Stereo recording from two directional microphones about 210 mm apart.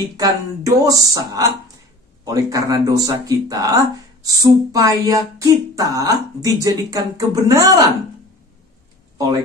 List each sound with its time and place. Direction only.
0.2 s speech: 15° right (ahead or behind)